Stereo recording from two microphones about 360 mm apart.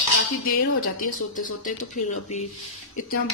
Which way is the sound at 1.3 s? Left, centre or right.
Left.